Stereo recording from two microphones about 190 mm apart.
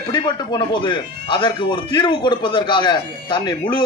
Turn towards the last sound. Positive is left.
turn(degrees=25)  # may be behind; listen again after turning